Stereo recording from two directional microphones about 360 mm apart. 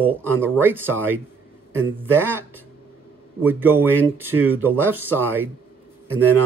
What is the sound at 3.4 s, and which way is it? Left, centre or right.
Speech, centre.